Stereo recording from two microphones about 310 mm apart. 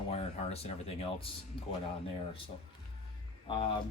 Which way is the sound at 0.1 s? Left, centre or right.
Centre.